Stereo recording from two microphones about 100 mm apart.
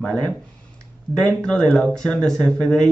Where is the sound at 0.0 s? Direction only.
10° left (ahead or behind).